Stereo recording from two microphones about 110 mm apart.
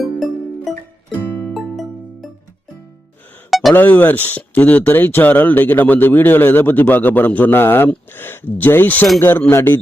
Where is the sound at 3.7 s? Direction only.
15° left (ahead or behind).